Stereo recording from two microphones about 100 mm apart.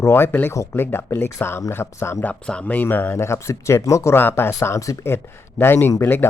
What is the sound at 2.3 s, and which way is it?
Speech, 15° left (ahead or behind).